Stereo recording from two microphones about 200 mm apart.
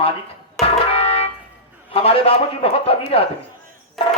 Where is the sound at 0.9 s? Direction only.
30° left (ahead or behind).